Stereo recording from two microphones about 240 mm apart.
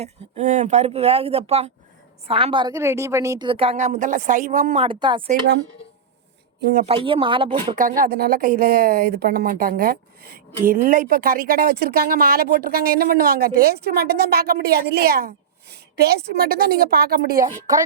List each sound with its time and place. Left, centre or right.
0.0 s a woman's voice: right
4.8 s a woman's voice: centre
6.8 s a woman's voice: right
7.8 s speech: right